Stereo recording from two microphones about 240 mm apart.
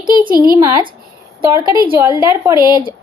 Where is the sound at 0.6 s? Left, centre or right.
Centre.